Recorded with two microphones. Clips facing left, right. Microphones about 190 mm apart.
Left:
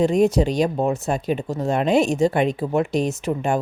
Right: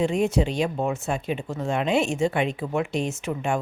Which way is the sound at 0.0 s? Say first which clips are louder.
Left 5 dB; 40° left (ahead or behind).